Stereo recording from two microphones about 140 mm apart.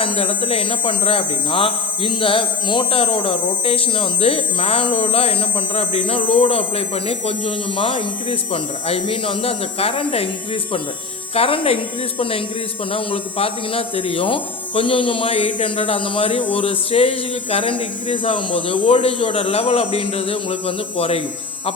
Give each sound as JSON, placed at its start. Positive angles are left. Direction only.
{"t": 0.0, "sound": "a man's voice", "side_deg": 40}
{"t": 12.9, "sound": "a man's voice", "side_deg": 40}